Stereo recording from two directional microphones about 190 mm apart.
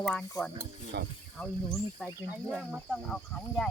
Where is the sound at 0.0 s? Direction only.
5° left (ahead or behind).